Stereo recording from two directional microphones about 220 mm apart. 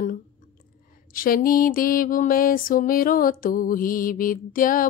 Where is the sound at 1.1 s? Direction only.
40° left (ahead or behind).